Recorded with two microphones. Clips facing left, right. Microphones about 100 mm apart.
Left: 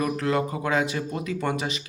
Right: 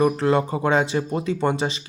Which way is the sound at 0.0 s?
30° right (ahead or behind).